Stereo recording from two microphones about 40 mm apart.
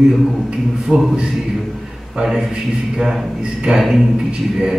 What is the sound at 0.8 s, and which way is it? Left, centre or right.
Speech, centre.